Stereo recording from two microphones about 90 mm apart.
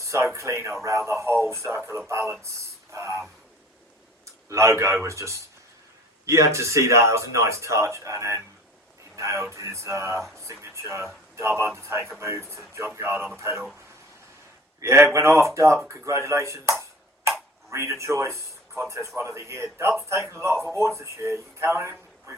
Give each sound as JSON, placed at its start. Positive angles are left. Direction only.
{"t": 0.0, "sound": "a sound", "side_deg": -35}
{"t": 0.3, "sound": "speech", "side_deg": -30}
{"t": 4.4, "sound": "a man's voice", "side_deg": -35}
{"t": 14.8, "sound": "speech", "side_deg": -30}